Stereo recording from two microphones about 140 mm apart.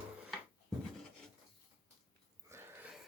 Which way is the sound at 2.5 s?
15° right (ahead or behind).